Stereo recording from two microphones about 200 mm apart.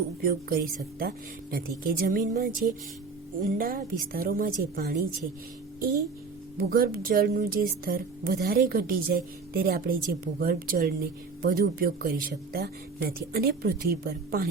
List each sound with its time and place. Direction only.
0.2 s speech: 45° right (ahead or behind)
6.6 s speech: 45° right (ahead or behind)